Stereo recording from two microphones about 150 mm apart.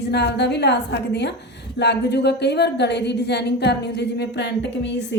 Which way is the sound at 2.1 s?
90° left.